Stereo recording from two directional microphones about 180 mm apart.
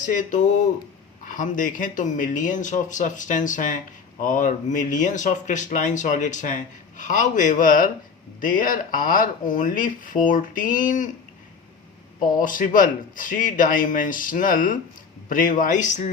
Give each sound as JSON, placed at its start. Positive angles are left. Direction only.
{"t": 0.0, "sound": "speech", "side_deg": 45}
{"t": 12.2, "sound": "speech", "side_deg": 50}